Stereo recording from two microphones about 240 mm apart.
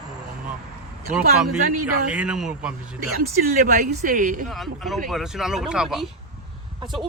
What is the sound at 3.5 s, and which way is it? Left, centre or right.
Speech, right.